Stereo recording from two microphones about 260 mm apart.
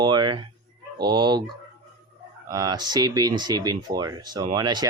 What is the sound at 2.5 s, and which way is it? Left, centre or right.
Speech, centre.